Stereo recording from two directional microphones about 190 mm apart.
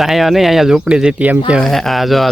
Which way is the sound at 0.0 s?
Centre (ahead or behind).